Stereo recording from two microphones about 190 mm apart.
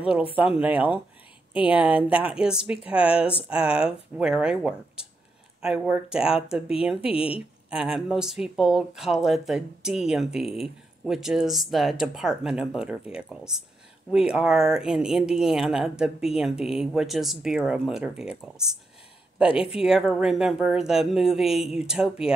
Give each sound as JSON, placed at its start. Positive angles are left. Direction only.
{"t": 0.4, "sound": "speech", "side_deg": -5}
{"t": 7.0, "sound": "speech", "side_deg": 30}
{"t": 7.7, "sound": "speech", "side_deg": -5}